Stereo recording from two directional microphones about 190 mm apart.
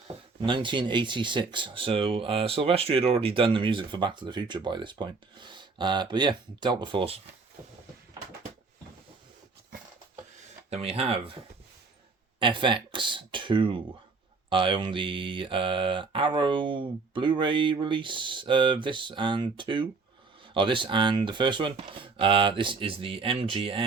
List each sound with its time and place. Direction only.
0.4 s speech: 25° right (ahead or behind)
10.7 s speech: 35° right (ahead or behind)
12.4 s speech: 25° right (ahead or behind)